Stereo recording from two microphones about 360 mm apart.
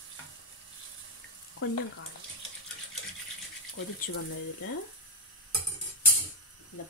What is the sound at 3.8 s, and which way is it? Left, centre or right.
Speech, left.